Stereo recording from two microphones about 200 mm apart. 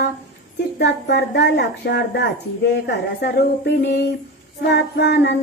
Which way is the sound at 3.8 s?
60° left (ahead or behind).